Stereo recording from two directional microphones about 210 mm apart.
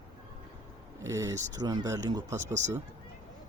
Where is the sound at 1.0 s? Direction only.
15° right (ahead or behind).